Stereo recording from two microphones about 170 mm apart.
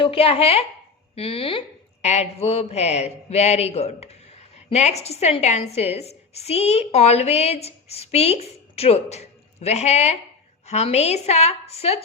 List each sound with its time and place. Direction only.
0.0 s speech: 35° left (ahead or behind)